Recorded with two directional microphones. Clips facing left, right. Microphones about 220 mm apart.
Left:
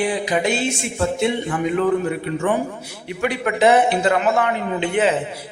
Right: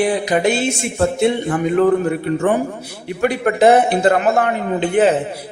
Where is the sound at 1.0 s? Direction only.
50° right (ahead or behind).